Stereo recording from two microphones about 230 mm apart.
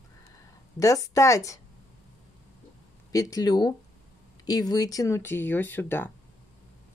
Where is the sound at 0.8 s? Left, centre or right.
Centre.